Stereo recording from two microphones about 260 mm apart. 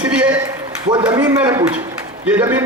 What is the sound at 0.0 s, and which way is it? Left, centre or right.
A man's voice, centre.